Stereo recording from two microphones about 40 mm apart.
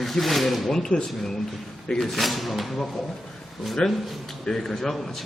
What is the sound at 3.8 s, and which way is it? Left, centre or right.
Speech, centre.